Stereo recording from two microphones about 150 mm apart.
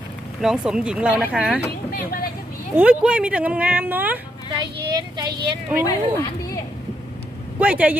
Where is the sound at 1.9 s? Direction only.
80° left.